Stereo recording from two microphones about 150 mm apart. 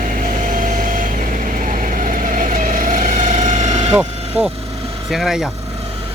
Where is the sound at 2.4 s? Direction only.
65° right (ahead or behind).